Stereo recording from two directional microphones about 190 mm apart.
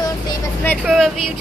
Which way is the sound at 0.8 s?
Centre (ahead or behind).